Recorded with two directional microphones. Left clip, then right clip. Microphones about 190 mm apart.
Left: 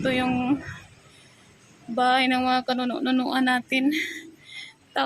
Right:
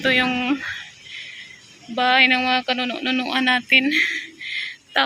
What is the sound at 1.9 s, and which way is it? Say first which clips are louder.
A child's voice: right 5 dB; 15° left (ahead or behind).